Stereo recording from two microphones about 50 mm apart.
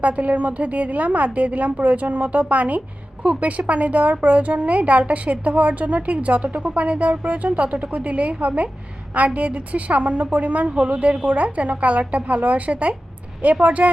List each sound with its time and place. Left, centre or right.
0.0 s a woman's voice: right